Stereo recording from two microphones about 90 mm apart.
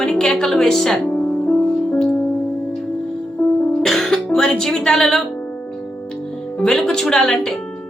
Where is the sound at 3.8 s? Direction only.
5° left (ahead or behind).